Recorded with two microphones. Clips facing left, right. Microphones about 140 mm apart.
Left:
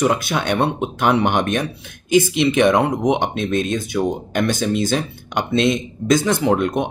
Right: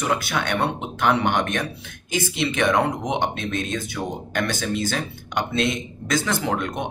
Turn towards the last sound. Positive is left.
turn(degrees=20)  # may be behind; listen again after turning